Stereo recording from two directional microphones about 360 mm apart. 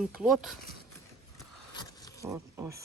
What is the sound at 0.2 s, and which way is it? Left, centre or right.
Speech, centre.